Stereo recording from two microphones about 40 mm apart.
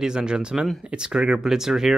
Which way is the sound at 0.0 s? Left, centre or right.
Centre.